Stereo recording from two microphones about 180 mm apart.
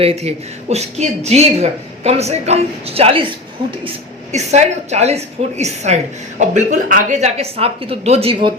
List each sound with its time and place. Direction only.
0.0 s speech: 35° right (ahead or behind)
4.3 s speech: 40° right (ahead or behind)